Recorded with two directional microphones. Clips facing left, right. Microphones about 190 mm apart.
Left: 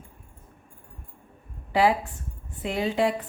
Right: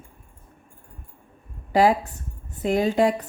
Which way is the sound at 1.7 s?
40° right (ahead or behind).